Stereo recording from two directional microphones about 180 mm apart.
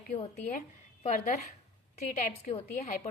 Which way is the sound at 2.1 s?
40° left (ahead or behind).